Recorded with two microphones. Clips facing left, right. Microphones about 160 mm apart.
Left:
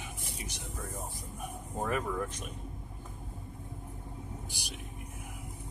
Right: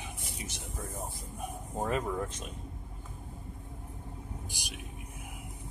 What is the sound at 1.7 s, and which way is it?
Speech, 25° right (ahead or behind).